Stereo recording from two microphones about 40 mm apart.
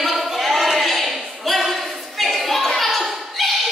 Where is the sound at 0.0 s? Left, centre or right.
Centre.